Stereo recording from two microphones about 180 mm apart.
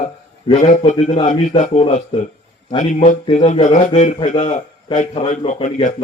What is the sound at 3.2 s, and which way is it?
A man's voice, 35° left (ahead or behind).